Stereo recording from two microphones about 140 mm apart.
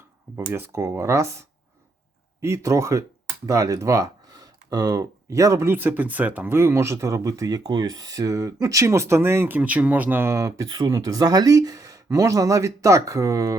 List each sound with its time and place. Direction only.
0.3 s speech: 15° right (ahead or behind)